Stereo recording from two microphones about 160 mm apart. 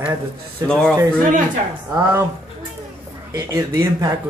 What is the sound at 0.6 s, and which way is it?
Speech, 5° left (ahead or behind).